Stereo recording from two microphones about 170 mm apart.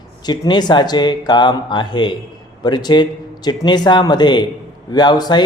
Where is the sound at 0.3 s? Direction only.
25° left (ahead or behind).